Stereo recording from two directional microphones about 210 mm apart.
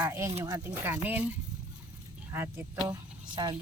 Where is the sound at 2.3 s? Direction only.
10° right (ahead or behind).